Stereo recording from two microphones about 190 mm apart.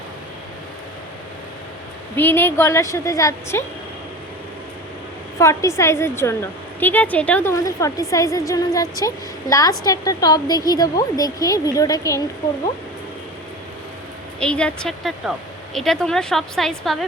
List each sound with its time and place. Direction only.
2.1 s a woman's voice: 10° left (ahead or behind)
5.4 s a woman's voice: 15° left (ahead or behind)
14.3 s speech: 5° left (ahead or behind)